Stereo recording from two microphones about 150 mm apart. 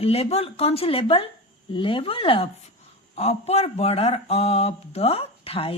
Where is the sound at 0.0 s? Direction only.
40° left (ahead or behind).